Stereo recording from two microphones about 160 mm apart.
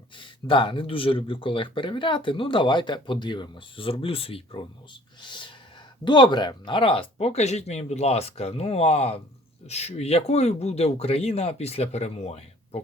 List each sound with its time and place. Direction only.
0.2 s speech: 30° left (ahead or behind)
5.2 s a sound: 30° left (ahead or behind)
6.1 s speech: 30° left (ahead or behind)